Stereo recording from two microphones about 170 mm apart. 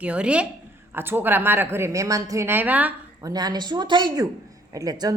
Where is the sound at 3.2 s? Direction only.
25° right (ahead or behind).